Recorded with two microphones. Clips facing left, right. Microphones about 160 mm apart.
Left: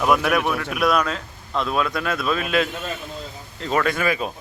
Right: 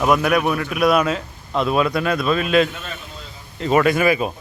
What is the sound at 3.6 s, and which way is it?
Speech, 10° right (ahead or behind).